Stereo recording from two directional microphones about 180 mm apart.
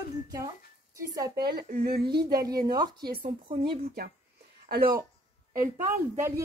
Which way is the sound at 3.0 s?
60° right (ahead or behind).